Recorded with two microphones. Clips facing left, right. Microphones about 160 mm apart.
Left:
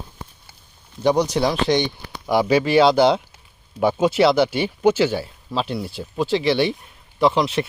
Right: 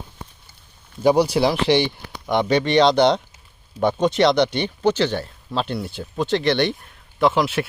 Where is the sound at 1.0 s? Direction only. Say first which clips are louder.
Right 2 dB; 10° right (ahead or behind).